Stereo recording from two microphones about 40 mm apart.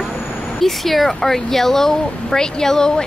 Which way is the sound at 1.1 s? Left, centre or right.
Centre.